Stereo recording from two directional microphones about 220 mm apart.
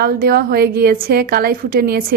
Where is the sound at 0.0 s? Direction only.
45° right (ahead or behind).